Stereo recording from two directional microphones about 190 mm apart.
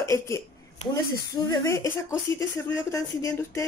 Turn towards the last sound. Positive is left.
turn(degrees=15)  # may be behind; listen again after turning